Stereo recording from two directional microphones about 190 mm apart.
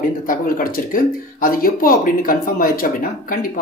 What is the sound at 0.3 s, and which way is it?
Speech, 50° left (ahead or behind).